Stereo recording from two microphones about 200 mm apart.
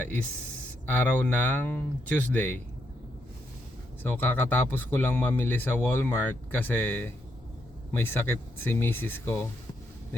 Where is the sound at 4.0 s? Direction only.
10° left (ahead or behind).